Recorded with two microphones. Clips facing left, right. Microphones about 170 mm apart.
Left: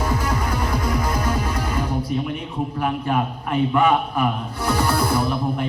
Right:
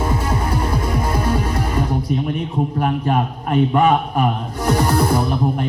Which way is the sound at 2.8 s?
40° right (ahead or behind).